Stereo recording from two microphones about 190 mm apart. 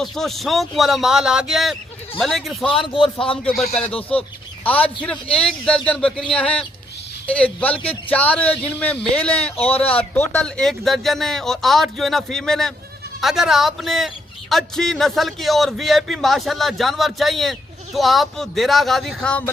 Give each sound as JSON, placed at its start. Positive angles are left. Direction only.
{"t": 0.0, "sound": "a man's voice", "side_deg": 0}
{"t": 2.7, "sound": "a man's voice", "side_deg": 30}
{"t": 3.2, "sound": "a man's voice", "side_deg": 5}
{"t": 3.8, "sound": "speech", "side_deg": 30}
{"t": 4.6, "sound": "a man's voice", "side_deg": 10}
{"t": 9.7, "sound": "speech", "side_deg": 30}
{"t": 10.0, "sound": "a man's voice", "side_deg": 10}